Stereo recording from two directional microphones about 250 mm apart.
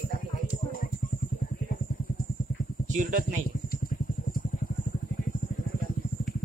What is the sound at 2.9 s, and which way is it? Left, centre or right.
Speech, right.